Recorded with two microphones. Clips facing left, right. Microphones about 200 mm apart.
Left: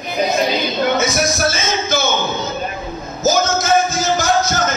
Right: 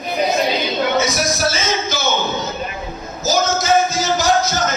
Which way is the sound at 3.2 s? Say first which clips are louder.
Left 2 dB; 50° left (ahead or behind).